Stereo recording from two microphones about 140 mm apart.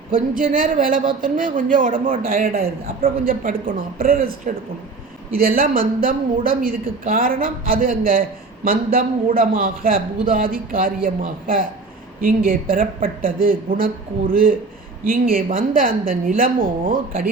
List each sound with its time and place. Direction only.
0.1 s a man's voice: 80° right